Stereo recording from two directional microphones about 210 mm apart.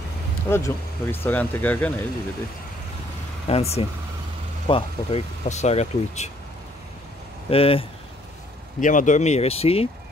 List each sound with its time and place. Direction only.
0.5 s speech: 10° left (ahead or behind)
3.4 s speech: 30° left (ahead or behind)
7.4 s speech: 25° left (ahead or behind)
8.8 s speech: 35° left (ahead or behind)